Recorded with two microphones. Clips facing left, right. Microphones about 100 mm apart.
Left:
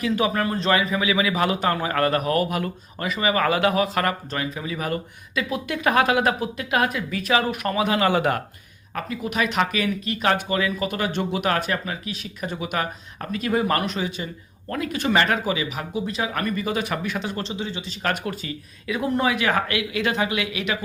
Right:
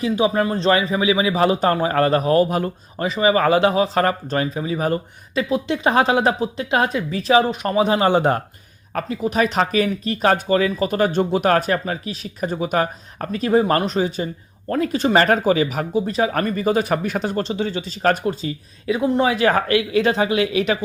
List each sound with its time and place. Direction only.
0.0 s speech: 25° right (ahead or behind)